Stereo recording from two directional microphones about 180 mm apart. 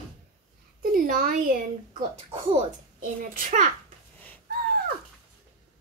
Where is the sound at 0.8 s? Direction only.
50° right (ahead or behind).